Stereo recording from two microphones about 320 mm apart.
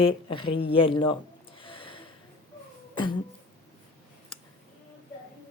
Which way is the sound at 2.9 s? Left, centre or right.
Centre.